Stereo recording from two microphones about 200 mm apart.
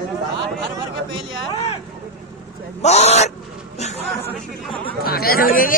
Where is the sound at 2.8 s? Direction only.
35° left (ahead or behind).